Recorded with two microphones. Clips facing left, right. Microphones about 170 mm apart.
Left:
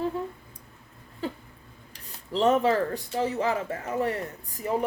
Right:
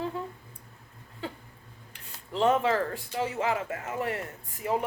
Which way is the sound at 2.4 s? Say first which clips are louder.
Left 2 dB; 40° left (ahead or behind).